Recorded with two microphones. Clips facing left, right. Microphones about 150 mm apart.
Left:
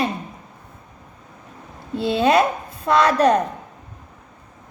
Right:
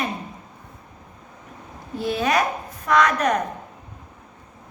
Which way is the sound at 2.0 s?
25° left (ahead or behind).